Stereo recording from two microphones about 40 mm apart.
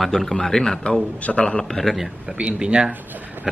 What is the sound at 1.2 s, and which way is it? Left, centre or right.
Speech, left.